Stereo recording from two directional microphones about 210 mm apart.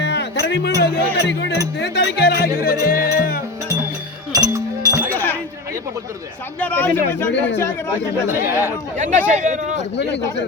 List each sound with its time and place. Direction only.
0.0 s music: 55° left (ahead or behind)
0.8 s speech: 55° left (ahead or behind)
1.8 s music: 50° left (ahead or behind)
4.3 s chink: 15° right (ahead or behind)
5.1 s chink: 10° left (ahead or behind)
6.6 s speech: 10° left (ahead or behind)
8.3 s speech: 10° right (ahead or behind)
9.0 s speech: 35° right (ahead or behind)
9.7 s speech: 55° left (ahead or behind)